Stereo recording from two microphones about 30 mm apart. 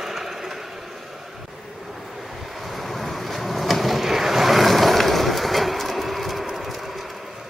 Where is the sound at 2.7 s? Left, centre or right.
Centre.